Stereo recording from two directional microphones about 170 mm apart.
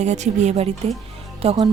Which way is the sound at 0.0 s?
45° right (ahead or behind).